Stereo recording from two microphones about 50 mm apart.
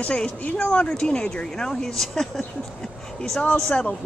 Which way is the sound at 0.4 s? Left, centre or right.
Left.